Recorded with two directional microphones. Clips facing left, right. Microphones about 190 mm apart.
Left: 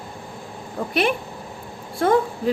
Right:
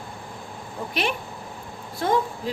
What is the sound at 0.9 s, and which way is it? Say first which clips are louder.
A woman's voice: left 6 dB; 50° left (ahead or behind).